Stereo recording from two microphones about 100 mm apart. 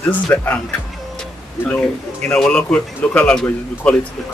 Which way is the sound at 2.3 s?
10° left (ahead or behind).